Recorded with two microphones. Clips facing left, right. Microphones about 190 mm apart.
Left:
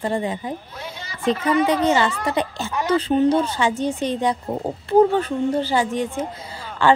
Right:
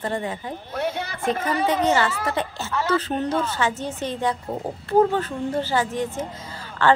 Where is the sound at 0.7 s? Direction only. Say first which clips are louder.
Right 8 dB; 65° right (ahead or behind).